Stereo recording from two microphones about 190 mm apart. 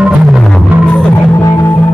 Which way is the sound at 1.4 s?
15° left (ahead or behind).